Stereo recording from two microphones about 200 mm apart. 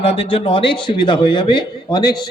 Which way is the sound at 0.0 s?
30° left (ahead or behind).